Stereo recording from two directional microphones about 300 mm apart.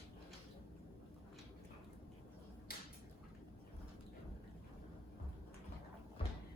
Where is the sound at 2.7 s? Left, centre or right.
Left.